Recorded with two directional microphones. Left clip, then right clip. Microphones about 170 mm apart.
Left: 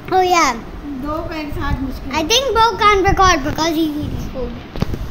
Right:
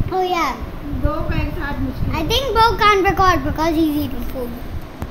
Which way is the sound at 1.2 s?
55° left (ahead or behind).